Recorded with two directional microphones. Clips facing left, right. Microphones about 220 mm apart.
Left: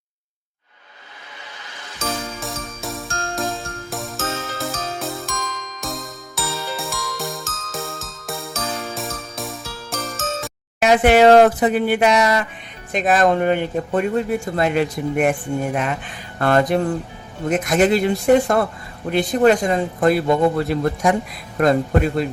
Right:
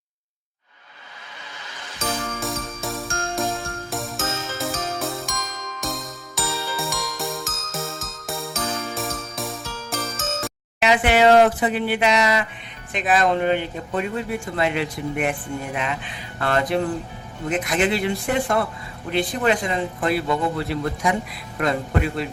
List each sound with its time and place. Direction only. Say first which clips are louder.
2.0 s jingle: left 1 dB; centre (ahead or behind)
2.4 s music: right 1 dB; centre (ahead or behind)
6.3 s music: even; 15° right (ahead or behind)
6.7 s music: even; centre (ahead or behind)
10.8 s speech: left 5 dB; 45° left (ahead or behind)